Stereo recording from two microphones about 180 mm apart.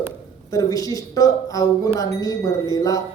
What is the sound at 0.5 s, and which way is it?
Speech, 20° left (ahead or behind).